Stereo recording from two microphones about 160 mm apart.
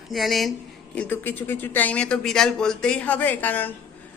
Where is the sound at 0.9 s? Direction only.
10° left (ahead or behind).